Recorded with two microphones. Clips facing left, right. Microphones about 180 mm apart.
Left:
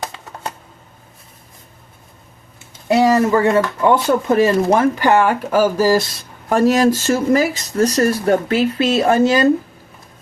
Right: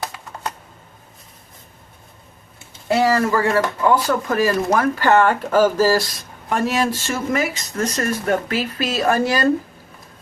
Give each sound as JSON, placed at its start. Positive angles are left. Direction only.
{"t": 2.8, "sound": "speech", "side_deg": 20}
{"t": 6.1, "sound": "speech", "side_deg": 40}